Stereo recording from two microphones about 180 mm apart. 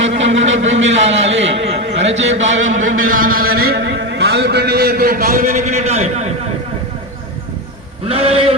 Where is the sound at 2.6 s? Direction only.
45° right (ahead or behind).